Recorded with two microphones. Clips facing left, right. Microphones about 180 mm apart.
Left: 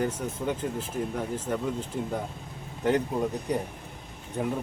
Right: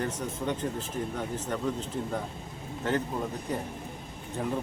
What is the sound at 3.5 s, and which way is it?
Speech, 15° left (ahead or behind).